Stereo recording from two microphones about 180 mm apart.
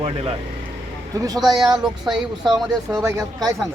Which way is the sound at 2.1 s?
20° right (ahead or behind).